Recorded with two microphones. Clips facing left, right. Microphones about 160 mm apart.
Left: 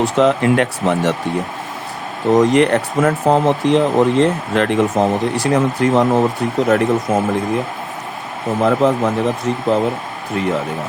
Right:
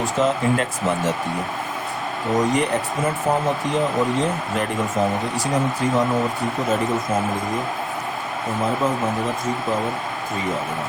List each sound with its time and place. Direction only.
0.0 s speech: 70° left (ahead or behind)
2.3 s speech: 75° left (ahead or behind)
8.6 s speech: 75° left (ahead or behind)